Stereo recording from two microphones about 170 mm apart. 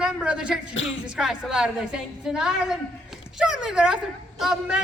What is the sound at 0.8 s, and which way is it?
Speech, 90° left.